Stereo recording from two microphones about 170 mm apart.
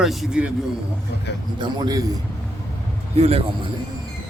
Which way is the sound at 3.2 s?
35° right (ahead or behind).